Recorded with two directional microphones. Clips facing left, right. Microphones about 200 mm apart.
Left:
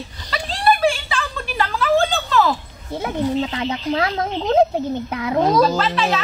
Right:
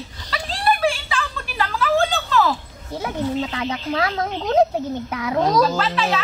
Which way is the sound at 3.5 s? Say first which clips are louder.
Left 2 dB; 25° left (ahead or behind).